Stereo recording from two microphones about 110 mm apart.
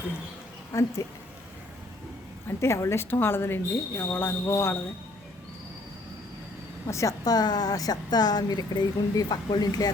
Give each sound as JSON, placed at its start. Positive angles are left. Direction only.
{"t": 0.7, "sound": "speech", "side_deg": 30}
{"t": 2.6, "sound": "speech", "side_deg": 25}
{"t": 6.8, "sound": "a woman's voice", "side_deg": 30}